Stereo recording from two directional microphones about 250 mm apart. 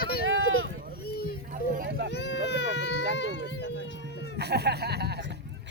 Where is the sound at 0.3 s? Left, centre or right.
Right.